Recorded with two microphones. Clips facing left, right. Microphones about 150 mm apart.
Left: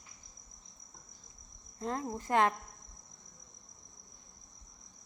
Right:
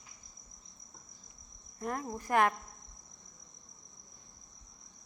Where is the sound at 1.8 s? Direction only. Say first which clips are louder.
Left 1 dB; 25° left (ahead or behind).